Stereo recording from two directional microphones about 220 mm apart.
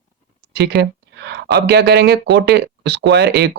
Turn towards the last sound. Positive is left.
turn(degrees=-45)  # may be behind; listen again after turning